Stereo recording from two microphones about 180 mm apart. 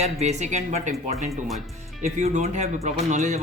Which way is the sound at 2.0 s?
40° right (ahead or behind).